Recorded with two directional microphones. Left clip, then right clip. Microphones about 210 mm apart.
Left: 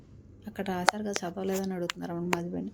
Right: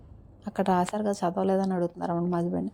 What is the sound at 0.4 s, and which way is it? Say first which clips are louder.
A woman's voice: right 2 dB; 35° right (ahead or behind).